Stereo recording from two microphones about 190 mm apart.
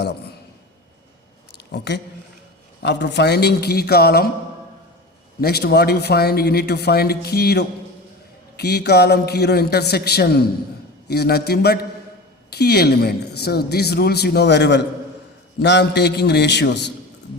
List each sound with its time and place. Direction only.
0.0 s a woman's voice: 60° left (ahead or behind)
1.5 s a sound: 60° left (ahead or behind)
2.8 s a woman's voice: 65° left (ahead or behind)
5.4 s a woman's voice: 55° left (ahead or behind)